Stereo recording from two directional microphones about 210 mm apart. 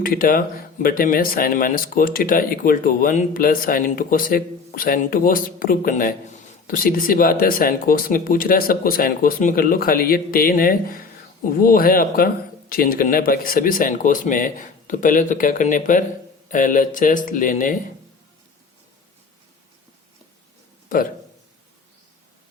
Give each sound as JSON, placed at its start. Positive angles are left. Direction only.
{"t": 0.0, "sound": "speech", "side_deg": 45}